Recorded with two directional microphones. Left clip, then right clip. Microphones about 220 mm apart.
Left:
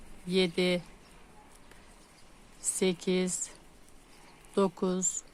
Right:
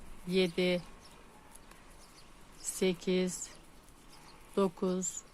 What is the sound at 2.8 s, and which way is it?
Speech, 20° left (ahead or behind).